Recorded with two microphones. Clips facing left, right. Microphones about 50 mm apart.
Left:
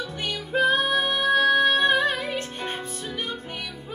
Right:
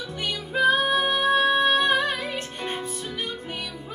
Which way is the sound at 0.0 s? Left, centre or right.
Centre.